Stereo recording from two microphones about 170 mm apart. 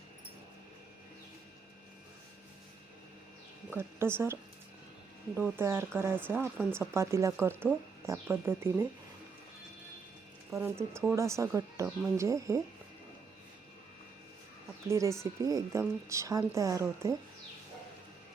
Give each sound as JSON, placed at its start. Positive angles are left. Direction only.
{"t": 3.7, "sound": "a woman's voice", "side_deg": -15}
{"t": 5.4, "sound": "a woman's voice", "side_deg": -15}
{"t": 10.6, "sound": "a woman's voice", "side_deg": -15}
{"t": 14.8, "sound": "a woman's voice", "side_deg": -15}